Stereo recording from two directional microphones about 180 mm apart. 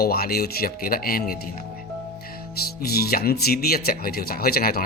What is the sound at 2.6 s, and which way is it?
Speech, 60° left (ahead or behind).